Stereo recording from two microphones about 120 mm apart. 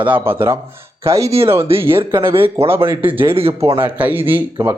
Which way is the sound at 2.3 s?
50° right (ahead or behind).